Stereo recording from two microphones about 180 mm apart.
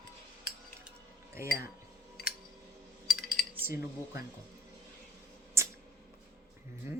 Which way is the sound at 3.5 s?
15° right (ahead or behind).